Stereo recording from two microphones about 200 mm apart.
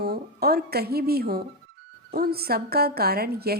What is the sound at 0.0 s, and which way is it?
Speech, 50° right (ahead or behind).